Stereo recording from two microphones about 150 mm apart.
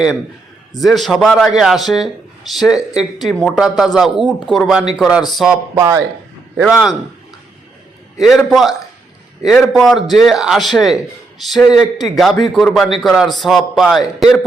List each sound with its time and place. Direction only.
0.8 s speech: centre (ahead or behind)
5.7 s a man's voice: 20° right (ahead or behind)
6.6 s speech: 5° right (ahead or behind)
8.2 s speech: centre (ahead or behind)